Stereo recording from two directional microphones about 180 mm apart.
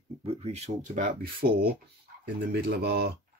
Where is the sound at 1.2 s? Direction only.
60° right (ahead or behind).